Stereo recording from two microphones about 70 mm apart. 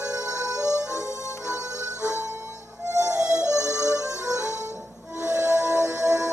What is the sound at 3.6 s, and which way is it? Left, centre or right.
Music, right.